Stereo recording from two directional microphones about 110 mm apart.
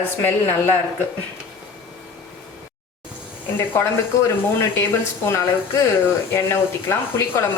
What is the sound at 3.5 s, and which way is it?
Speech, 20° left (ahead or behind).